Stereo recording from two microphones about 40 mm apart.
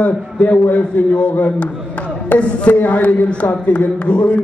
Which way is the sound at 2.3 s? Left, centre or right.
Left.